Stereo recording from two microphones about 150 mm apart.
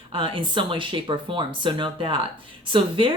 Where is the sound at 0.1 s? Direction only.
35° right (ahead or behind).